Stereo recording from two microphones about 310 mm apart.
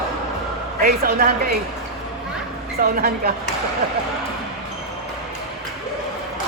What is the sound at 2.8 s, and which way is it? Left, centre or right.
Speech, right.